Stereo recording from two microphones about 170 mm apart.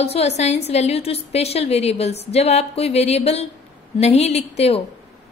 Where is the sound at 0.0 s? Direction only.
40° left (ahead or behind).